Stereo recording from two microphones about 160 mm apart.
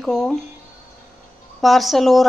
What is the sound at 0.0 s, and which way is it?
Speech, centre (ahead or behind).